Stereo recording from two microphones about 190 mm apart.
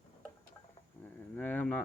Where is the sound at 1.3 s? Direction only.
10° left (ahead or behind).